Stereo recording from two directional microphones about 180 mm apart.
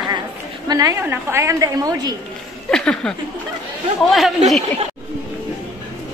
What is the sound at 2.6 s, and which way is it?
A woman's voice, 5° left (ahead or behind).